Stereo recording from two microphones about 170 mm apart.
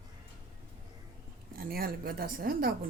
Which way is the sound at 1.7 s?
60° right (ahead or behind).